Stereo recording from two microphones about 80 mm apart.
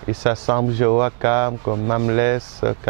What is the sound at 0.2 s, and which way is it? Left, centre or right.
Speech, centre.